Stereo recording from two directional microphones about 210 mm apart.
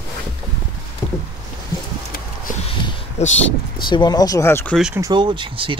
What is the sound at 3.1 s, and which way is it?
Speech, 35° left (ahead or behind).